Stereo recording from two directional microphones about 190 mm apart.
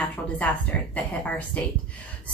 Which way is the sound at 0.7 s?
10° left (ahead or behind).